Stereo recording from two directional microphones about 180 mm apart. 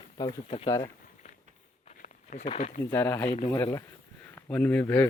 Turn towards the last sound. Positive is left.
turn(degrees=10)  # may be behind; listen again after turning